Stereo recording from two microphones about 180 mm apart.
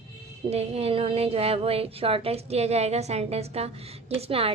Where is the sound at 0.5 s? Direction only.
35° right (ahead or behind).